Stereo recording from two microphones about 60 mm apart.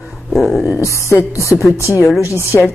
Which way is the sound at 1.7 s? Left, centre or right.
Left.